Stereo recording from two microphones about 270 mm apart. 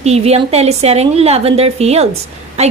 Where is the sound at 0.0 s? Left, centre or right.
Right.